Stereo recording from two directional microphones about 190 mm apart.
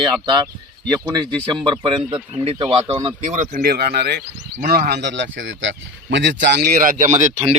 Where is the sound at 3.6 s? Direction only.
55° right (ahead or behind).